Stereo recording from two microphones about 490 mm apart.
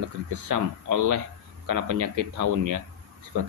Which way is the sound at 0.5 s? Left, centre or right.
Right.